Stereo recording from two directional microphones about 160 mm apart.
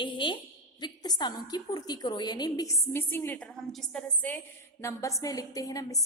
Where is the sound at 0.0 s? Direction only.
30° left (ahead or behind).